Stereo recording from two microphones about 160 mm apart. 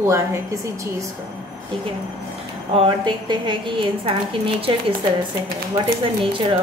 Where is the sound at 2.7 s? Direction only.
30° right (ahead or behind).